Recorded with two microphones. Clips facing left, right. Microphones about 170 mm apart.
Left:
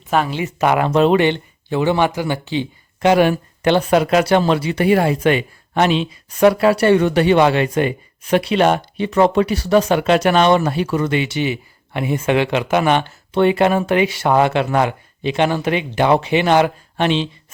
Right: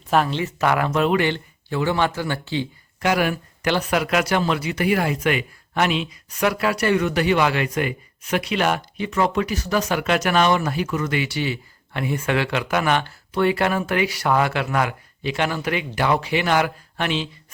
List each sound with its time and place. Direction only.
0.1 s speech: centre (ahead or behind)
0.3 s speech: 15° left (ahead or behind)